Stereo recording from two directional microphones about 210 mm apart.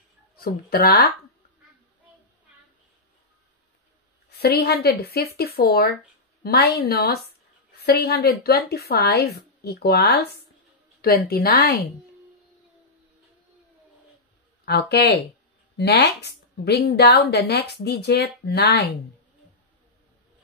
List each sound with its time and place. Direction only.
0.4 s speech: 45° left (ahead or behind)
4.4 s speech: 50° left (ahead or behind)
14.6 s speech: 50° left (ahead or behind)